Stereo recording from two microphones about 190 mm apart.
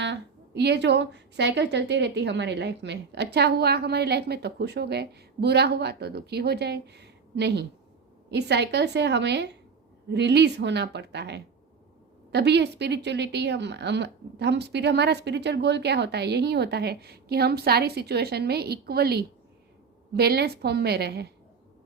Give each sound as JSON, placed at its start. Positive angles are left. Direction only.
{"t": 0.0, "sound": "a woman's voice", "side_deg": -65}